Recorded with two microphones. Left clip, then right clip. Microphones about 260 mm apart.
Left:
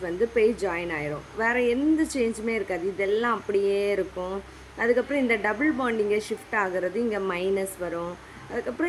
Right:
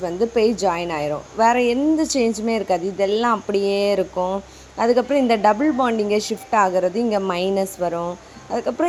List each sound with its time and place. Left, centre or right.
0.0 s a woman's voice: centre